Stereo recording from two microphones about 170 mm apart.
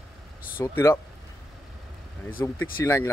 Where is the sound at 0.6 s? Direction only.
15° left (ahead or behind).